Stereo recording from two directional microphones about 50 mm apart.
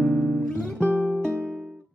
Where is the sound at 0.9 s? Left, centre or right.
Right.